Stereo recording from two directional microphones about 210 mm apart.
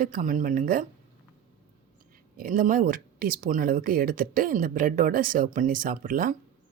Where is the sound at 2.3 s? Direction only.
40° right (ahead or behind).